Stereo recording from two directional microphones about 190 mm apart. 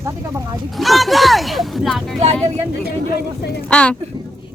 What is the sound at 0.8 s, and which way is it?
Speech, centre (ahead or behind).